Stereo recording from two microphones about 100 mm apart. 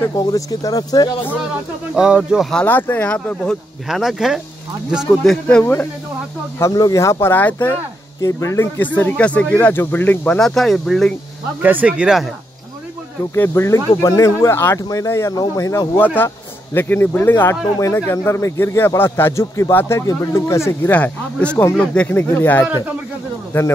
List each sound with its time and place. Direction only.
0.1 s speech: 40° left (ahead or behind)
2.0 s speech: 10° right (ahead or behind)
2.6 s speech: 20° left (ahead or behind)
3.8 s speech: 5° right (ahead or behind)
5.6 s speech: 20° left (ahead or behind)
6.6 s speech: 35° left (ahead or behind); by 7.8 s 15° left (ahead or behind)
8.2 s speech: 30° left (ahead or behind); by 11.1 s 5° left (ahead or behind)
11.6 s speech: 15° right (ahead or behind)
13.3 s speech: 25° left (ahead or behind)
14.8 s speech: 35° left (ahead or behind)
16.7 s speech: 20° left (ahead or behind)
20.9 s speech: 15° left (ahead or behind)